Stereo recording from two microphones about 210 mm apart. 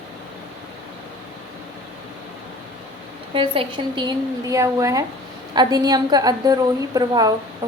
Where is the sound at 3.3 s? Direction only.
25° right (ahead or behind).